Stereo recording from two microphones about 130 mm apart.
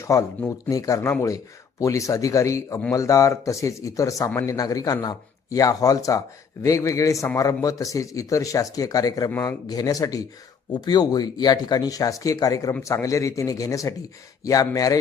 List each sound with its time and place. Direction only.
0.0 s a man's voice: 25° left (ahead or behind)